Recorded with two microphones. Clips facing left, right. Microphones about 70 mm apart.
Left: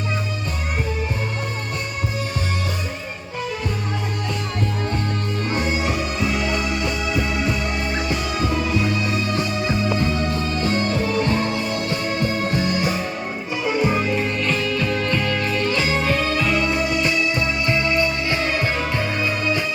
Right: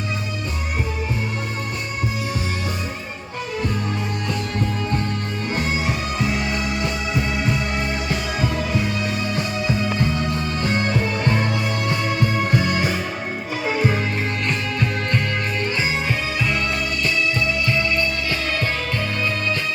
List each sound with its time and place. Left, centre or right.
10.8 s music: right
12.5 s music: right
14.3 s music: right
15.9 s music: centre
16.6 s music: centre